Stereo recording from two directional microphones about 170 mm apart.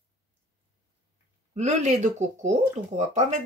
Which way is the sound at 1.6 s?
40° right (ahead or behind).